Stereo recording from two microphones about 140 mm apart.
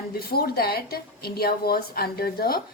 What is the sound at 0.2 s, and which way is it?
A woman's voice, 90° left.